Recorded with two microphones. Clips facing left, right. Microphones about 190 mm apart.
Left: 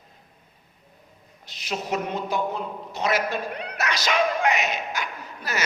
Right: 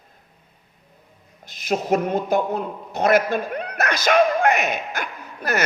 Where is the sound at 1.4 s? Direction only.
50° right (ahead or behind).